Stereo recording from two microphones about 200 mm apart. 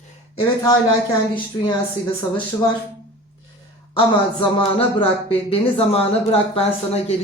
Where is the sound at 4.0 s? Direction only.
25° left (ahead or behind).